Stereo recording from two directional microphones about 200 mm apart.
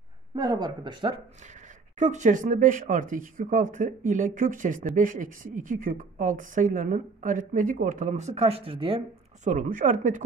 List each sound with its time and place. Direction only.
0.4 s speech: 20° right (ahead or behind)
2.0 s speech: 35° right (ahead or behind)
9.5 s speech: 40° right (ahead or behind)